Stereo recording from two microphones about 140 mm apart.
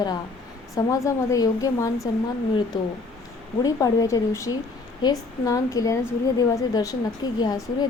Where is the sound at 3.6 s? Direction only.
25° left (ahead or behind).